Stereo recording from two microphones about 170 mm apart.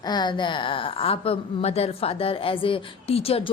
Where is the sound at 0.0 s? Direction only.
25° left (ahead or behind).